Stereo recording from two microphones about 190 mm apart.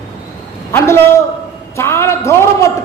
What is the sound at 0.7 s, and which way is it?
Speech, 15° left (ahead or behind).